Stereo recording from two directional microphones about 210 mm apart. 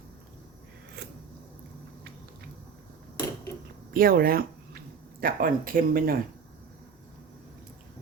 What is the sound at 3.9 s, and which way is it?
Speech, 45° right (ahead or behind).